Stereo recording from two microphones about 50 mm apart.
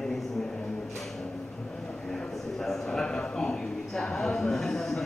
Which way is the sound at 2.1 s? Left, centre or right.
Centre.